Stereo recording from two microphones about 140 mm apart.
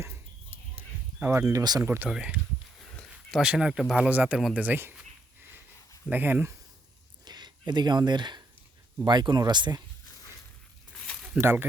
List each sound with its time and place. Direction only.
1.2 s speech: 20° right (ahead or behind)
1.8 s speech: 15° right (ahead or behind)
2.9 s a sound: 5° left (ahead or behind)
3.4 s speech: 5° right (ahead or behind)
6.1 s speech: 15° right (ahead or behind)
7.3 s speech: 30° right (ahead or behind)
11.3 s speech: 15° right (ahead or behind)